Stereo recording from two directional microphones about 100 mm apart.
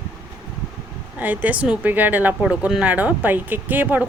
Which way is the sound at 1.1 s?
15° right (ahead or behind).